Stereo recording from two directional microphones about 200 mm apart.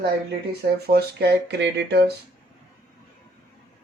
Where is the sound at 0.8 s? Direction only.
55° right (ahead or behind).